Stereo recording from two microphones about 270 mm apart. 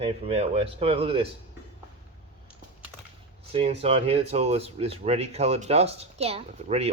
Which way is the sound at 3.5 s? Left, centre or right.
Right.